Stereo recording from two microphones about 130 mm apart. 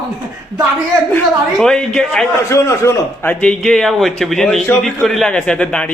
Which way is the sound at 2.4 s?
20° left (ahead or behind).